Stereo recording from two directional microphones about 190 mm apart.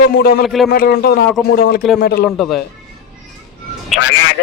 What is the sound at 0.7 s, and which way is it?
Speech, 55° left (ahead or behind).